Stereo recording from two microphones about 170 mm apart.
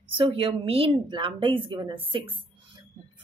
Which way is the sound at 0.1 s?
30° right (ahead or behind).